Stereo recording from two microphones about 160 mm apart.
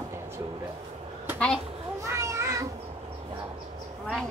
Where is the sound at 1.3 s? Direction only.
5° left (ahead or behind).